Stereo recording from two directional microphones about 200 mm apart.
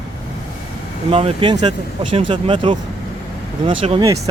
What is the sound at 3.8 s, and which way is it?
Speech, 30° right (ahead or behind).